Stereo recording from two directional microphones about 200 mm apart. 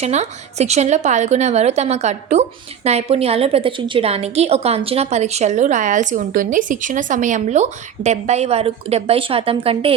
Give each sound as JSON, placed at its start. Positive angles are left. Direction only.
{"t": 0.0, "sound": "a woman's voice", "side_deg": -35}